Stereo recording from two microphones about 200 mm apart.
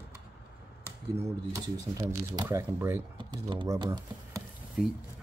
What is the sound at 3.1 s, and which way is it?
Speech, 25° right (ahead or behind).